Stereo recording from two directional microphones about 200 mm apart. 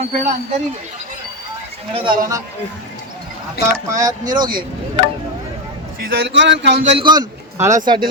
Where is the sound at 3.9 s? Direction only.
20° right (ahead or behind).